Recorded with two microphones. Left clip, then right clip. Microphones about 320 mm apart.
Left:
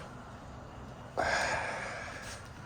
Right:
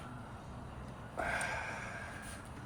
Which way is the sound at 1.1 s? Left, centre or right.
Left.